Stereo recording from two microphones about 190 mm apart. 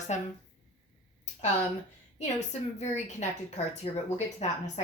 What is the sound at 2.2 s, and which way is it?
A woman's voice, 35° left (ahead or behind).